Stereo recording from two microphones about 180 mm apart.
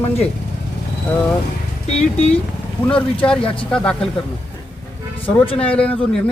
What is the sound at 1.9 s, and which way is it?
Speech, 35° left (ahead or behind).